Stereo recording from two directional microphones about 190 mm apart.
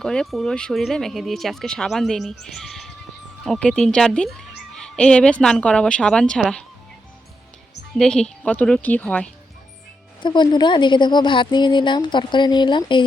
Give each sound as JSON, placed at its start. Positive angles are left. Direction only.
{"t": 0.0, "sound": "speech", "side_deg": 5}
{"t": 7.9, "sound": "speech", "side_deg": 5}
{"t": 10.2, "sound": "a woman's voice", "side_deg": 25}